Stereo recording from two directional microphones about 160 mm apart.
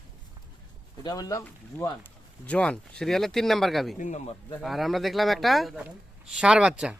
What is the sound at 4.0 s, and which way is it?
Speech, 45° left (ahead or behind).